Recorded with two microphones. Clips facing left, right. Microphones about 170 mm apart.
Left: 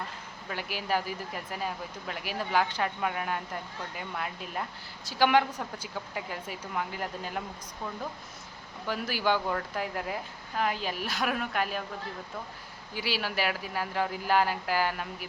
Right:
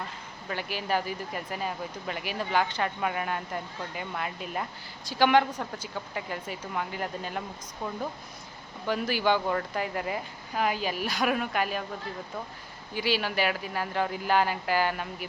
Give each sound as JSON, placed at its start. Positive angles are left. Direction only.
{"t": 0.4, "sound": "a woman's voice", "side_deg": 5}
{"t": 8.9, "sound": "speech", "side_deg": 5}
{"t": 12.9, "sound": "speech", "side_deg": 5}